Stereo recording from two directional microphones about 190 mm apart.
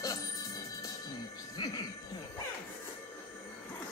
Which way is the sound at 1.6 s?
25° left (ahead or behind).